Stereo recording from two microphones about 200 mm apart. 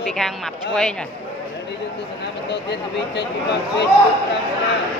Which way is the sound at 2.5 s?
60° left (ahead or behind).